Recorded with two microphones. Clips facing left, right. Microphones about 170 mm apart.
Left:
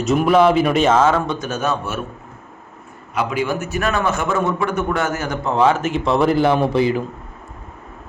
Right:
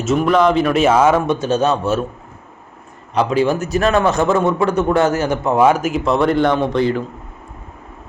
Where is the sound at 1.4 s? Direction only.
30° right (ahead or behind).